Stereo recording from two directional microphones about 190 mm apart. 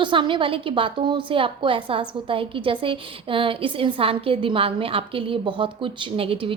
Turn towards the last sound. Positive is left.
turn(degrees=-30)  # may be behind; listen again after turning